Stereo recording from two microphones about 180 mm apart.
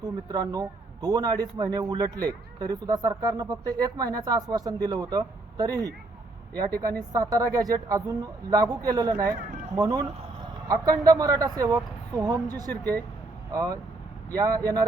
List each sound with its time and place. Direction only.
0.0 s speech: 20° right (ahead or behind)
7.1 s speech: 20° right (ahead or behind)
12.7 s speech: 10° left (ahead or behind)
13.5 s speech: 20° right (ahead or behind)